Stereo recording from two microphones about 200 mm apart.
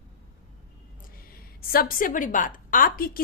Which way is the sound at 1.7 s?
45° left (ahead or behind).